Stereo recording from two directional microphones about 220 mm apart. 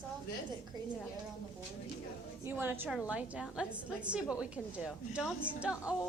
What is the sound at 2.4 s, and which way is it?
A woman's voice, 10° right (ahead or behind).